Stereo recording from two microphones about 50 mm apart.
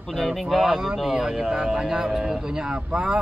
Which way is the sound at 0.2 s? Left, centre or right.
Centre.